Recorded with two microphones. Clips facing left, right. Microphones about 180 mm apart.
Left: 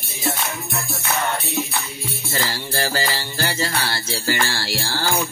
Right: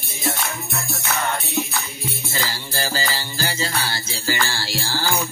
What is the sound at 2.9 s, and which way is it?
Music, 65° left (ahead or behind).